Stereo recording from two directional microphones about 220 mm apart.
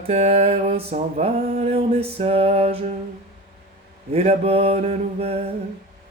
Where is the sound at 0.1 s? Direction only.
30° right (ahead or behind).